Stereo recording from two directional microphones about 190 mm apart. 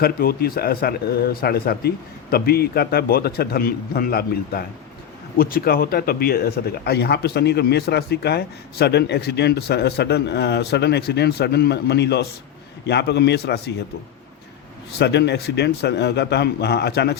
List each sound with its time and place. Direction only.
0.0 s a man's voice: 50° left (ahead or behind)
14.9 s speech: 60° left (ahead or behind)